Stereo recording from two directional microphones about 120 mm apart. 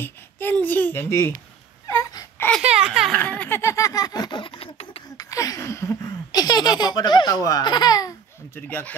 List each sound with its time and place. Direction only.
0.0 s speech: 15° left (ahead or behind)
2.0 s wail: 25° left (ahead or behind)
2.6 s speech: 10° right (ahead or behind)
3.2 s laughter: 15° left (ahead or behind); by 5.0 s 50° left (ahead or behind)
5.1 s laughter: 30° left (ahead or behind)
8.5 s speech: 15° left (ahead or behind)